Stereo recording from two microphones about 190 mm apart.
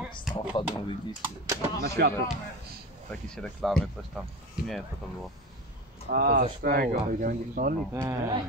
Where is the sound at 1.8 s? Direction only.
55° right (ahead or behind).